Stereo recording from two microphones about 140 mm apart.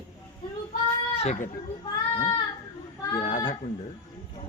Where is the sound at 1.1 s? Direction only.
50° left (ahead or behind).